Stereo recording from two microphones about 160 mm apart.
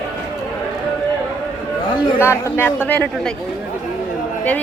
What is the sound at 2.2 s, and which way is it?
A woman's voice, 15° left (ahead or behind).